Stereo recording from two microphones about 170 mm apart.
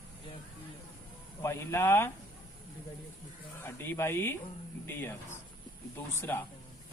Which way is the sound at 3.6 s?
15° left (ahead or behind).